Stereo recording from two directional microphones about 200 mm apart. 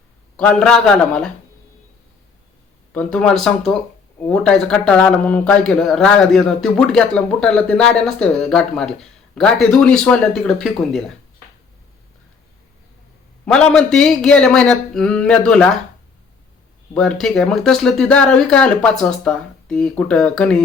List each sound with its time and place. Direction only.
0.3 s speech: 5° left (ahead or behind)
2.9 s speech: 5° left (ahead or behind)
13.7 s speech: 5° left (ahead or behind)
16.9 s speech: 5° left (ahead or behind)